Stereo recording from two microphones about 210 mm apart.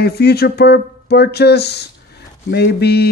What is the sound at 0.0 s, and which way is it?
Speech, 50° left (ahead or behind).